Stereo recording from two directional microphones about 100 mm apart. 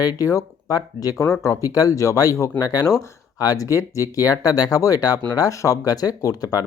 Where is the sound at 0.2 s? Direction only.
35° left (ahead or behind).